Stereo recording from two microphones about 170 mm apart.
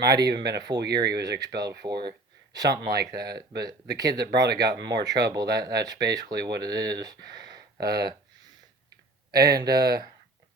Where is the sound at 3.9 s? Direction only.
20° right (ahead or behind).